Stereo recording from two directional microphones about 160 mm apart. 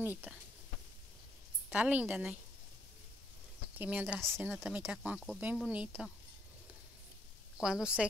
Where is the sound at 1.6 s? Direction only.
10° right (ahead or behind).